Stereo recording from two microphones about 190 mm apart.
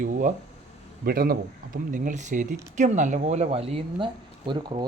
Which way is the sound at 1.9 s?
40° right (ahead or behind).